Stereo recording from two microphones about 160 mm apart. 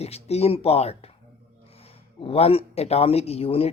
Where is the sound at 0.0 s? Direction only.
40° left (ahead or behind).